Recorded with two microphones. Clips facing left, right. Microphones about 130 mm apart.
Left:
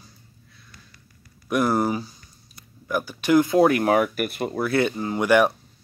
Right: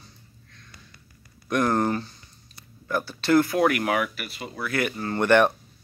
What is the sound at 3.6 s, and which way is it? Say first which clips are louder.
Speech: left 5 dB; 30° left (ahead or behind).